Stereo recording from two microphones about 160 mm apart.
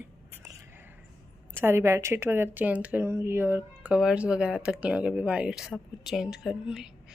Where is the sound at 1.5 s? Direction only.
15° right (ahead or behind).